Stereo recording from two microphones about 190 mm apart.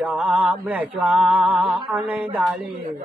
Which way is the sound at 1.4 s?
30° right (ahead or behind).